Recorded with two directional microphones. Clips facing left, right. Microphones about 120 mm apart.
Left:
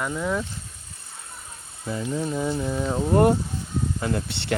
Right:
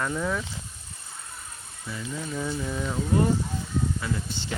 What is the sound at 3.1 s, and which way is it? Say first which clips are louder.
Speech: left 6 dB; 60° left (ahead or behind).